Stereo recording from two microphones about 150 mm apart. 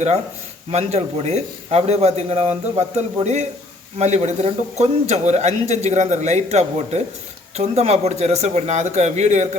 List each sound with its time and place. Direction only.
0.7 s speech: 45° right (ahead or behind)